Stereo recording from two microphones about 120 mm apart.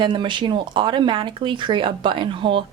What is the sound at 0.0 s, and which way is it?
Speech, 40° right (ahead or behind).